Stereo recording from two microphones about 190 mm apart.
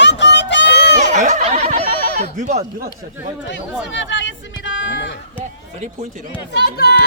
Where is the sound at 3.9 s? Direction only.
75° left (ahead or behind).